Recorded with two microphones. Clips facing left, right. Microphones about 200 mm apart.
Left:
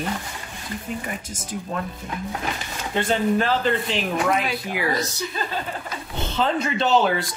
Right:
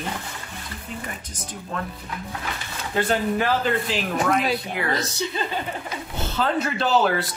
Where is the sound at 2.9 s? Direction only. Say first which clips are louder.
Left 1 dB; 5° right (ahead or behind).